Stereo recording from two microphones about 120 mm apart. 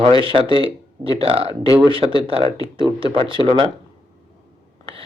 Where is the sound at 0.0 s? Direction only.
45° right (ahead or behind).